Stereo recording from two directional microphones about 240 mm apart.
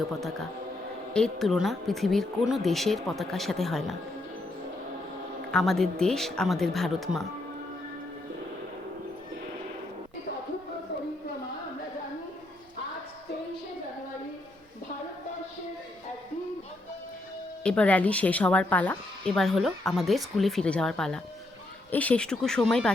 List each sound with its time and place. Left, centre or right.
0.2 s a woman's voice: centre
5.5 s a woman's voice: centre
17.6 s a woman's voice: centre